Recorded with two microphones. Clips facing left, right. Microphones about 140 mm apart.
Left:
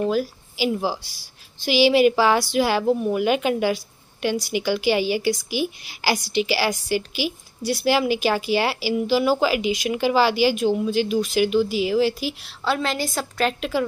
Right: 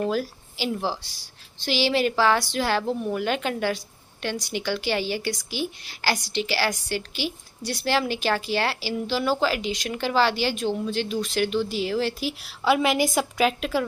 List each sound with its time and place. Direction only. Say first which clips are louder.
0.0 s a woman's voice: left 3 dB; 5° left (ahead or behind)